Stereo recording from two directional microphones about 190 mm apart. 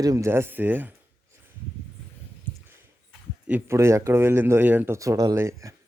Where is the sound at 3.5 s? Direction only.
10° right (ahead or behind).